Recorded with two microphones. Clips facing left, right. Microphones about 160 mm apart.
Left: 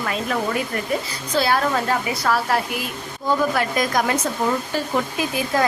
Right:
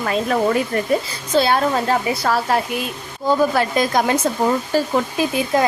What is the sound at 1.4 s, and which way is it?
Speech, 25° right (ahead or behind).